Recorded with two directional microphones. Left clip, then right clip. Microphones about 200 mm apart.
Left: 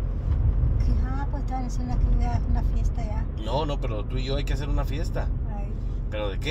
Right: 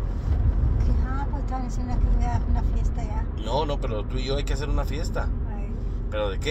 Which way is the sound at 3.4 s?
20° left (ahead or behind).